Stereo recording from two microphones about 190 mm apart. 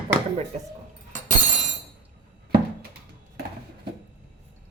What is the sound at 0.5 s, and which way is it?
Speech, 35° right (ahead or behind).